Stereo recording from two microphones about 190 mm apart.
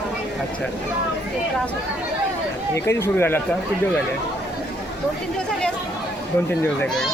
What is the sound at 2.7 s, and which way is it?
Speech, 15° left (ahead or behind).